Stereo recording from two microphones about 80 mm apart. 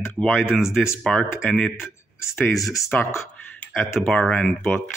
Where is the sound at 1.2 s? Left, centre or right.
Left.